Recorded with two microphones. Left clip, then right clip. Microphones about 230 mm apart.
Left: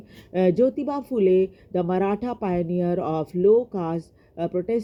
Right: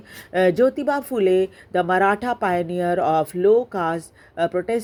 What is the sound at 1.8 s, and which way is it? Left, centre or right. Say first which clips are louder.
Speech: right 7 dB; centre.